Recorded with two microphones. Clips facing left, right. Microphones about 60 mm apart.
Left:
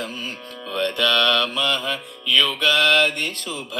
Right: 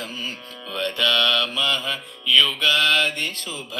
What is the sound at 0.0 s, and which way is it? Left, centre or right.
Music, left.